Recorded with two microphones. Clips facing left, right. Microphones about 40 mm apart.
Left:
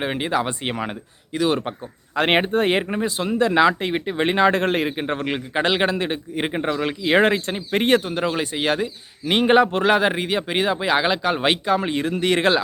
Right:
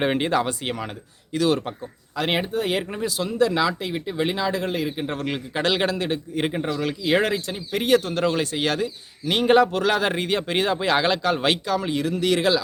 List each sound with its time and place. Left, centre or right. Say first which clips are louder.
0.0 s speech: right 3 dB; centre
0.4 s a man's voice: left 2 dB; left
2.1 s speech: left 5 dB; left
2.9 s speech: left 4 dB; left
4.9 s a man's voice: left 3 dB; left
8.0 s a man's voice: even; centre
10.1 s speech: left 1 dB; centre; by 12.6 s left